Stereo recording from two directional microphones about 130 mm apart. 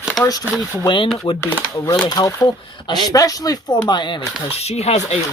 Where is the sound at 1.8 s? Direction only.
30° left (ahead or behind).